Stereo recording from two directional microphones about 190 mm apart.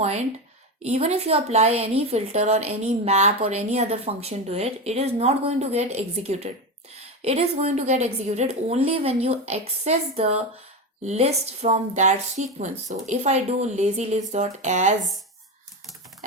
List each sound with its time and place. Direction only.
0.8 s a woman's voice: 35° right (ahead or behind)